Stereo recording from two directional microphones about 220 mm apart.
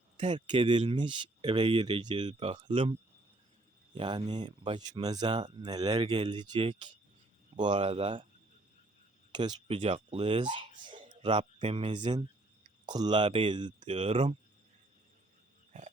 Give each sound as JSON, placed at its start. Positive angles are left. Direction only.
{"t": 0.3, "sound": "speech", "side_deg": -20}
{"t": 3.9, "sound": "speech", "side_deg": -20}
{"t": 9.3, "sound": "speech", "side_deg": -20}